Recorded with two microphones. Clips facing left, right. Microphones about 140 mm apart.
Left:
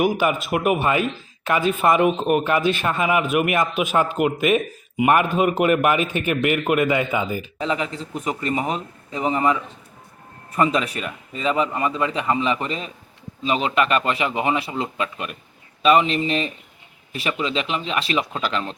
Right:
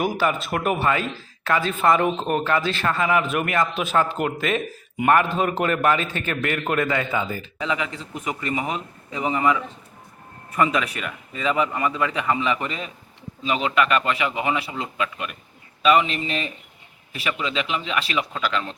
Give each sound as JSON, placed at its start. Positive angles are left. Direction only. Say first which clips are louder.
{"t": 0.0, "sound": "a man's voice", "louder": "left 3 dB", "side_deg": 15}
{"t": 7.6, "sound": "a man's voice", "louder": "left 1 dB", "side_deg": 35}